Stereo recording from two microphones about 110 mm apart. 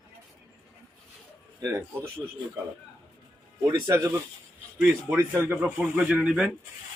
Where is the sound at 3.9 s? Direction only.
25° right (ahead or behind).